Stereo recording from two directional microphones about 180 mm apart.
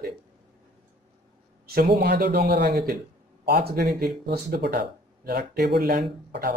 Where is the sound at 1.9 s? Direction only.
65° right (ahead or behind).